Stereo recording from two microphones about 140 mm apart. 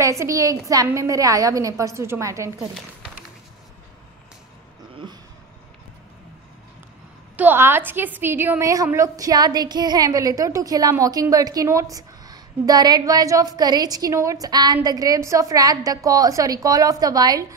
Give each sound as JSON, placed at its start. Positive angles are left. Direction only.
{"t": 0.0, "sound": "a woman's voice", "side_deg": -20}
{"t": 7.3, "sound": "a woman's voice", "side_deg": -15}